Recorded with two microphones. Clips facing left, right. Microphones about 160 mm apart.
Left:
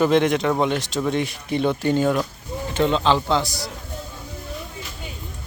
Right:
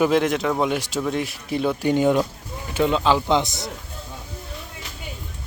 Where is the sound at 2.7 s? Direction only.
5° right (ahead or behind).